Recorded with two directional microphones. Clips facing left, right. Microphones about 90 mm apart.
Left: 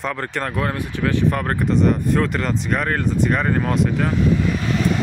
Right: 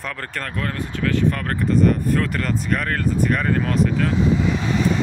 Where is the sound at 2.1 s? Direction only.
5° left (ahead or behind).